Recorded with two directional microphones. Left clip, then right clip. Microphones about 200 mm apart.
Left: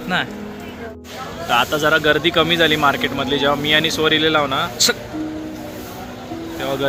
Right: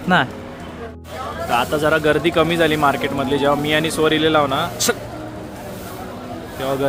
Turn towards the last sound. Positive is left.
turn(degrees=-10)  # may be behind; listen again after turning